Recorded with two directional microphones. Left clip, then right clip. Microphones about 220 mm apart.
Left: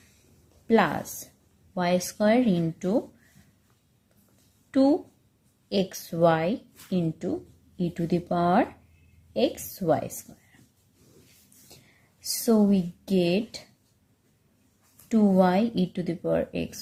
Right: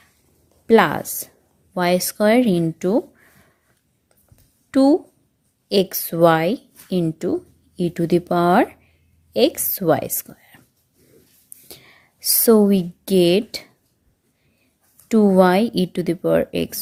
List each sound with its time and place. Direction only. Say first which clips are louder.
0.7 s a woman's voice: right 8 dB; 35° right (ahead or behind)
4.7 s a woman's voice: right 7 dB; 35° right (ahead or behind)
11.7 s a woman's voice: right 12 dB; 40° right (ahead or behind)
15.1 s a woman's voice: right 8 dB; 35° right (ahead or behind)